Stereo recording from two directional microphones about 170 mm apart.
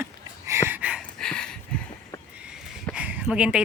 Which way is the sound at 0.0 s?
15° right (ahead or behind).